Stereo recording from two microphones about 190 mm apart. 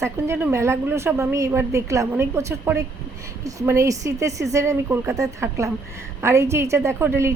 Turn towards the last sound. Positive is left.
turn(degrees=-15)  # may be behind; listen again after turning